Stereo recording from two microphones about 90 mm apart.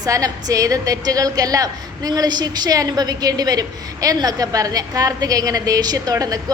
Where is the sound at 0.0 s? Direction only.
40° right (ahead or behind).